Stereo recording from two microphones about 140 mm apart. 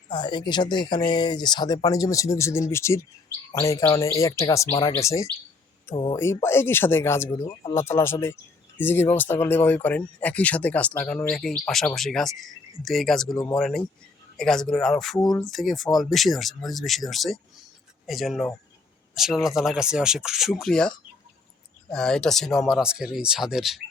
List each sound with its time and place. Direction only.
0.1 s speech: 35° left (ahead or behind)
3.5 s chirp: 20° left (ahead or behind)
6.1 s speech: 15° left (ahead or behind)
7.4 s speech: 40° left (ahead or behind)
7.8 s speech: 20° left (ahead or behind); by 23.8 s 5° right (ahead or behind)